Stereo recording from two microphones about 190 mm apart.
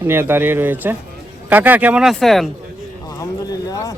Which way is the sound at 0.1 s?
10° right (ahead or behind).